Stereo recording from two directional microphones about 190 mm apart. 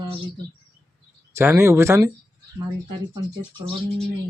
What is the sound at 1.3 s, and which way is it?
Speech, 15° right (ahead or behind).